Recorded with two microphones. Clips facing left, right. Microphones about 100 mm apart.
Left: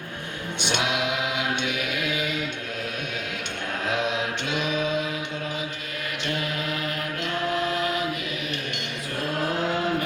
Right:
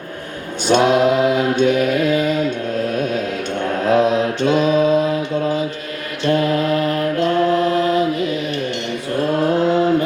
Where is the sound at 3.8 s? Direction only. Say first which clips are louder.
Right 12 dB; 40° right (ahead or behind).